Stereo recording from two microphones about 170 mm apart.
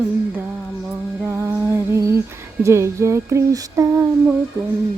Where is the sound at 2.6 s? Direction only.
15° right (ahead or behind).